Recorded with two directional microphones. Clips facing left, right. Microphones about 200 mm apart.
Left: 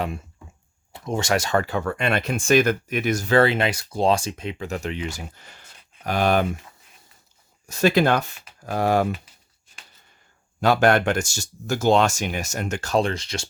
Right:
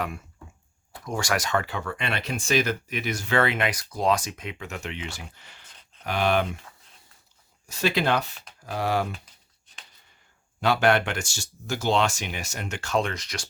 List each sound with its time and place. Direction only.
0.9 s speech: 25° left (ahead or behind); by 6.6 s 45° left (ahead or behind)
7.7 s speech: 45° left (ahead or behind)
10.6 s speech: 45° left (ahead or behind); by 13.5 s 25° left (ahead or behind)